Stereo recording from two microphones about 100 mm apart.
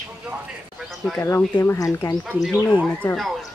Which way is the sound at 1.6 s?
30° left (ahead or behind).